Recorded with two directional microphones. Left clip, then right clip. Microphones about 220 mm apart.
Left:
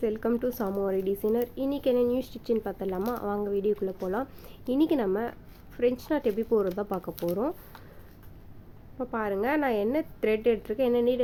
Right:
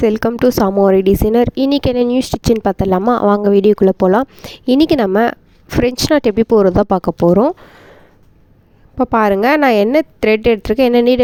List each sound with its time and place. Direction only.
0.0 s speech: 45° right (ahead or behind)
9.0 s speech: 45° right (ahead or behind)